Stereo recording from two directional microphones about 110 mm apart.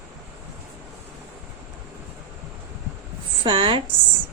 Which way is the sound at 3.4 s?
45° right (ahead or behind).